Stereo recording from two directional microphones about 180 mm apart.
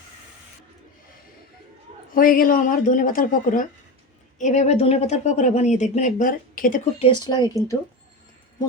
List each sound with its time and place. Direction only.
2.1 s a woman's voice: 50° left (ahead or behind)
7.0 s speech: 20° left (ahead or behind)